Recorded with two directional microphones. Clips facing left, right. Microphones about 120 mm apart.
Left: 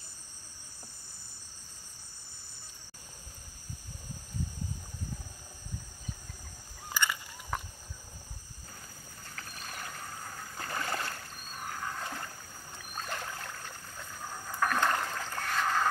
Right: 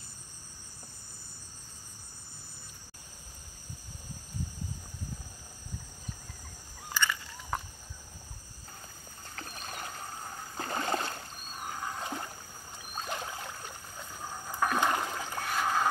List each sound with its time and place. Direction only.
6.9 s fowl: 10° left (ahead or behind)
9.3 s rowboat: 30° right (ahead or behind)
12.7 s a sound: 20° right (ahead or behind)